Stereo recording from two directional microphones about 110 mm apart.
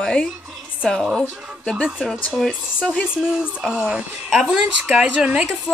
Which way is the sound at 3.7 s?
10° right (ahead or behind).